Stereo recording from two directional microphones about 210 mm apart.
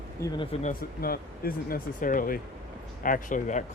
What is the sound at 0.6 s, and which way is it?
Speech, 45° left (ahead or behind).